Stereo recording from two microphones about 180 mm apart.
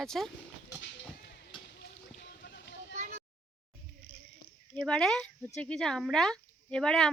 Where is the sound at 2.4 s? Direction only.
65° left (ahead or behind).